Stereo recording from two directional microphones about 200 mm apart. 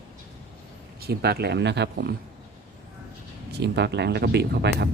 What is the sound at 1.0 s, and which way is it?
Speech, 55° right (ahead or behind).